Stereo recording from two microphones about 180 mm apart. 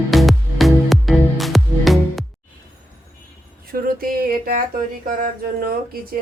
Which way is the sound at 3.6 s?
55° right (ahead or behind).